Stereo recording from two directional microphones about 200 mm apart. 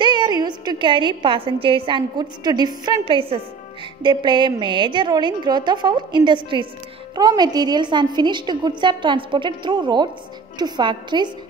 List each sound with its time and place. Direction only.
0.0 s a woman's voice: 20° right (ahead or behind)